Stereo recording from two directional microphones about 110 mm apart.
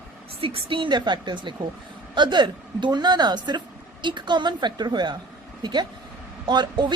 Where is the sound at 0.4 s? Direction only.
55° right (ahead or behind).